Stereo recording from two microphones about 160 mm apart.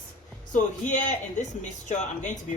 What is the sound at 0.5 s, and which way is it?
Speech, 50° left (ahead or behind).